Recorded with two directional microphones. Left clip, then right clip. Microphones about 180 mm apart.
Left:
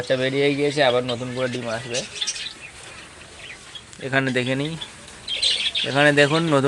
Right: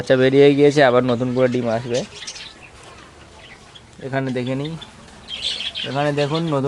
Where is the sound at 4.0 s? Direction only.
5° right (ahead or behind).